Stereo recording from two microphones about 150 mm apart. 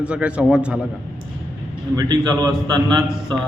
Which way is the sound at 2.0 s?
25° right (ahead or behind).